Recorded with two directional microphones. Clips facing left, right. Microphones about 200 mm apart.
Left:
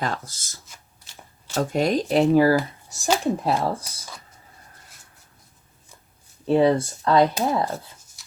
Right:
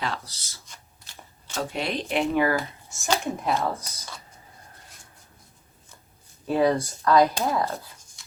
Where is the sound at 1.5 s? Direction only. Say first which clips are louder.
Left 7 dB; 45° left (ahead or behind).